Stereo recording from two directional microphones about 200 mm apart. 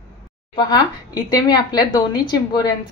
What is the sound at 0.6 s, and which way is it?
Speech, 20° left (ahead or behind).